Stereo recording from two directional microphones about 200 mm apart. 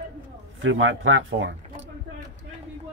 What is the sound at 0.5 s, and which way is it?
A man's voice, 75° right (ahead or behind).